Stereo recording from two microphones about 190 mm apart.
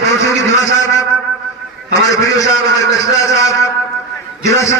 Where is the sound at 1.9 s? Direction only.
20° left (ahead or behind).